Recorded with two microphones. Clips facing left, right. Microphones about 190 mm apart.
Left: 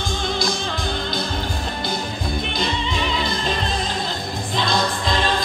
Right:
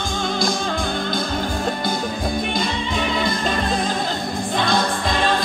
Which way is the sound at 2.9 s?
50° right (ahead or behind).